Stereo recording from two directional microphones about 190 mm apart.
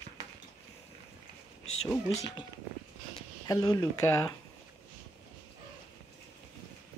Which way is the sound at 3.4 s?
20° left (ahead or behind).